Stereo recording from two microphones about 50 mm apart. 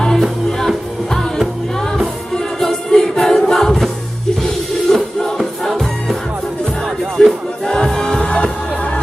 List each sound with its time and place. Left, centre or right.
0.0 s music: centre
4.9 s music: centre
7.2 s music: centre
7.6 s music: centre
8.3 s music: left